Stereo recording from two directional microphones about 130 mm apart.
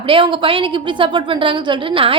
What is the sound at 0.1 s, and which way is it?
A woman's voice, 40° right (ahead or behind).